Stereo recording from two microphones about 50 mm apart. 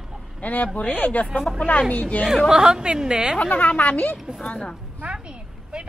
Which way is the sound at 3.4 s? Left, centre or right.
Left.